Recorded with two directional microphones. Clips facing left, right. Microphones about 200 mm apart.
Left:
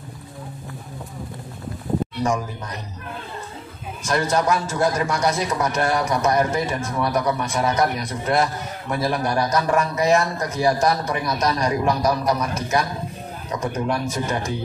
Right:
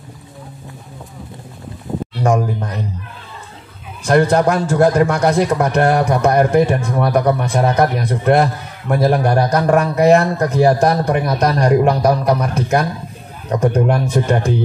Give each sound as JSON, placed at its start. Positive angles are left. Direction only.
{"t": 2.1, "sound": "a man's voice", "side_deg": -60}
{"t": 4.0, "sound": "a man's voice", "side_deg": -60}